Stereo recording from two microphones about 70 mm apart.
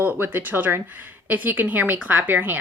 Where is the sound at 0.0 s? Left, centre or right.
Right.